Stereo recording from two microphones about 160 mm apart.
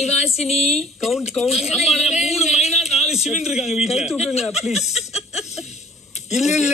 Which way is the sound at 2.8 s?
Centre (ahead or behind).